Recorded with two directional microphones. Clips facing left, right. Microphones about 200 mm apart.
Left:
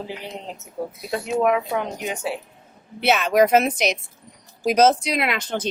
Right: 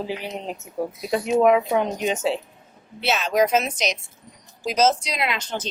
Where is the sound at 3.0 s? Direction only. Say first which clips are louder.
Left 3 dB; 55° left (ahead or behind).